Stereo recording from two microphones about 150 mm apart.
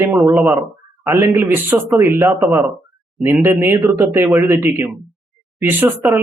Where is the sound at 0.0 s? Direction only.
15° right (ahead or behind).